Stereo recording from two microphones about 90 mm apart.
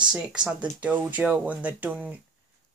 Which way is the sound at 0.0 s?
10° right (ahead or behind).